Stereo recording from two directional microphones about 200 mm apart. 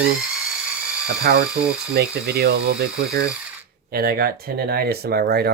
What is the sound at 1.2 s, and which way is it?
Speech, 55° right (ahead or behind).